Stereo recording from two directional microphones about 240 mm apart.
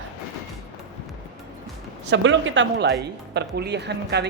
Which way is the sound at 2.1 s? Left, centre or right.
Right.